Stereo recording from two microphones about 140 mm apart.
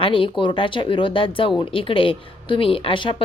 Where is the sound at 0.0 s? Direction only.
40° left (ahead or behind).